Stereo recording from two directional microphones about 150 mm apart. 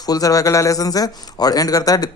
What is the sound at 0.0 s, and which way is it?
A man's voice, 25° left (ahead or behind).